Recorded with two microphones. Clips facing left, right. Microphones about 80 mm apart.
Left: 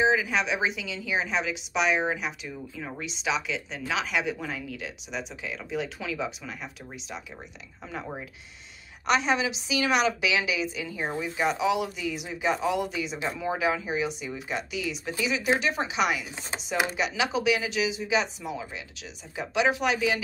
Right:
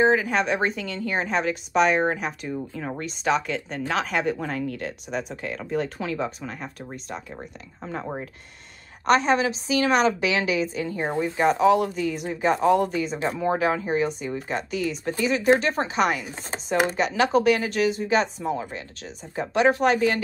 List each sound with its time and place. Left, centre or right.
0.0 s speech: right
7.8 s a woman's voice: right